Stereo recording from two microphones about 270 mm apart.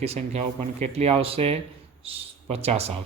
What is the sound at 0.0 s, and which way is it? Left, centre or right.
Speech, right.